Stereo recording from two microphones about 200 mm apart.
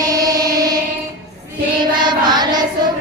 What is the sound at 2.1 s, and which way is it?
Child singing, 20° right (ahead or behind).